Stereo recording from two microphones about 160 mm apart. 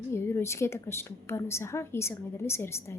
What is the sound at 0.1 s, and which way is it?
A woman's voice, 15° left (ahead or behind).